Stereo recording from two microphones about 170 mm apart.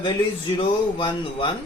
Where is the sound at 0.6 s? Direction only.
30° left (ahead or behind).